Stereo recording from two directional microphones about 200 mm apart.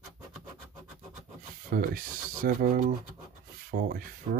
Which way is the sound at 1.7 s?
45° right (ahead or behind).